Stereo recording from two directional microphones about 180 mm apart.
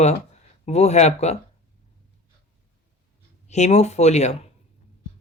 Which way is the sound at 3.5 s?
40° left (ahead or behind).